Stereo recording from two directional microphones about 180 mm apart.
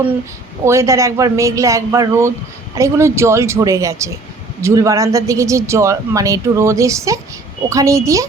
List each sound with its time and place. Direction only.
0.6 s speech: 15° right (ahead or behind)